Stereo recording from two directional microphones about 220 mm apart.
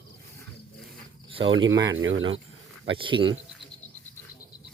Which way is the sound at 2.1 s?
25° right (ahead or behind).